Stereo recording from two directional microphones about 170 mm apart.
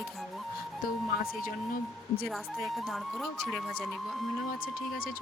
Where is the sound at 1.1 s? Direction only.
60° left (ahead or behind).